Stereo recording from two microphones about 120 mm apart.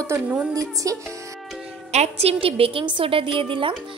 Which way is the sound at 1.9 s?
65° right (ahead or behind).